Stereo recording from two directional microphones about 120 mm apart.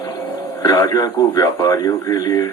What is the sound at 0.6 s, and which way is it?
A man's voice, 35° left (ahead or behind).